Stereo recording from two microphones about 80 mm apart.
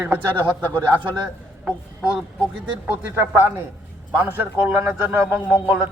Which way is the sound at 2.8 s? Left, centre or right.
Right.